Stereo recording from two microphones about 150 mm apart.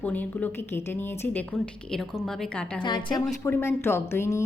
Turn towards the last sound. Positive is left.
turn(degrees=20)  # may be behind; listen again after turning